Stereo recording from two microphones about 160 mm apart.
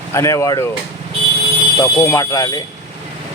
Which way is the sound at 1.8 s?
20° left (ahead or behind).